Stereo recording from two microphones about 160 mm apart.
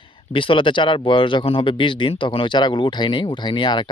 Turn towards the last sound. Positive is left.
turn(degrees=30)  # may be behind; listen again after turning